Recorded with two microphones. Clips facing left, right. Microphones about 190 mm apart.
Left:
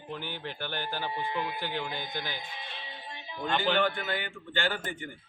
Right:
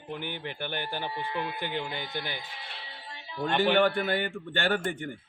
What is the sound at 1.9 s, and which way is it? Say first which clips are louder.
Speech: right 1 dB; 15° left (ahead or behind).